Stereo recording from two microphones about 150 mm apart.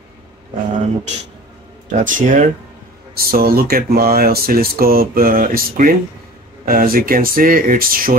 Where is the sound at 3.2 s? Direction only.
90° right.